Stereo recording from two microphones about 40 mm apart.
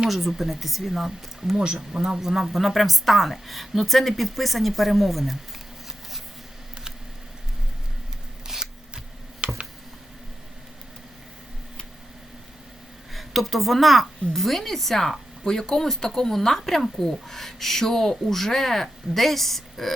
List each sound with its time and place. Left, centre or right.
0.1 s speech: centre
1.5 s speech: right; by 5.4 s centre
8.5 s single-lens reflex camera: centre
9.4 s a sound: right
13.1 s a woman's voice: centre